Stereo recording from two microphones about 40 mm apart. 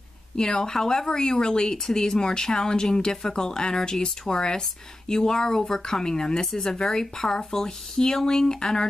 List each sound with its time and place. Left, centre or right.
0.4 s speech: centre